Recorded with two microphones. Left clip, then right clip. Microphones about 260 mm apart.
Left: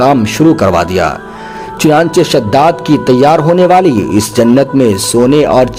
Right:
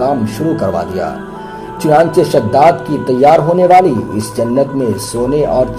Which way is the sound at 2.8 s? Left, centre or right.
Left.